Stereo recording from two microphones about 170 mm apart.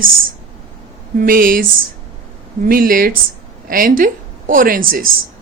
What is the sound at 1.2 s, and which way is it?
A woman's voice, 55° right (ahead or behind).